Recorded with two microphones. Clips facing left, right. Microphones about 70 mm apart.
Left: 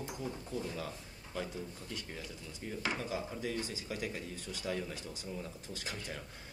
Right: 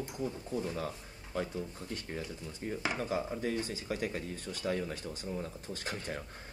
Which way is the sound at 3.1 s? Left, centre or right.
Right.